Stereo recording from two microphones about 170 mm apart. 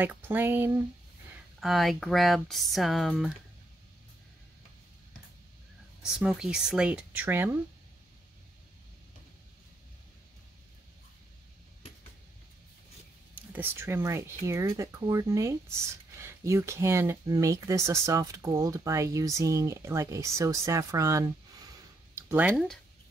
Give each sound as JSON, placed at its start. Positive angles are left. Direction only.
{"t": 0.0, "sound": "speech", "side_deg": -10}
{"t": 1.6, "sound": "speech", "side_deg": 0}
{"t": 6.1, "sound": "speech", "side_deg": -5}
{"t": 13.3, "sound": "speech", "side_deg": -10}
{"t": 22.1, "sound": "a sound", "side_deg": -10}